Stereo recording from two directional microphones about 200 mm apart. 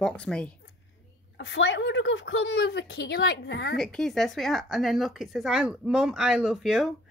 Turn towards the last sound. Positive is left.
turn(degrees=0)  # may be behind; listen again after turning